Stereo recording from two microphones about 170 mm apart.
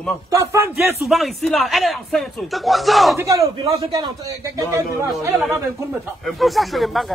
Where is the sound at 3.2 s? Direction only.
20° right (ahead or behind).